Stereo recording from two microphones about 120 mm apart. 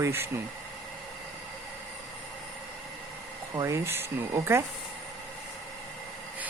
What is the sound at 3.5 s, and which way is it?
Speech, 25° right (ahead or behind).